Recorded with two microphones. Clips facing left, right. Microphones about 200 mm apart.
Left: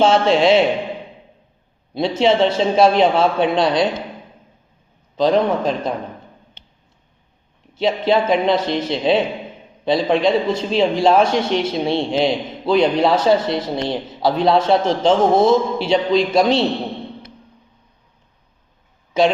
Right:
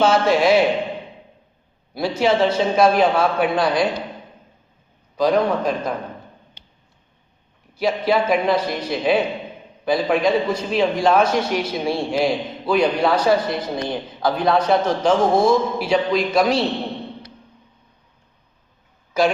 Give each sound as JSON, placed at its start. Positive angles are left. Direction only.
{"t": 0.0, "sound": "a man's voice", "side_deg": 25}
{"t": 1.9, "sound": "a man's voice", "side_deg": 25}
{"t": 5.1, "sound": "a man's voice", "side_deg": 25}
{"t": 7.8, "sound": "a man's voice", "side_deg": 25}